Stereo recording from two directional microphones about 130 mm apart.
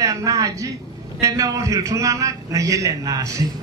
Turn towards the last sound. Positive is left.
turn(degrees=-25)  # may be behind; listen again after turning